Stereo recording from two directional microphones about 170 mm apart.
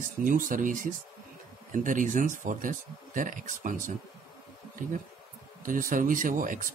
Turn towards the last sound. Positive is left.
turn(degrees=-55)  # may be behind; listen again after turning